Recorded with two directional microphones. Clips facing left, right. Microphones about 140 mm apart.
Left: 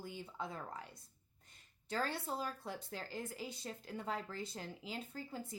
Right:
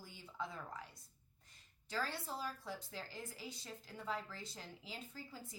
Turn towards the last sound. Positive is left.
turn(degrees=55)  # may be behind; listen again after turning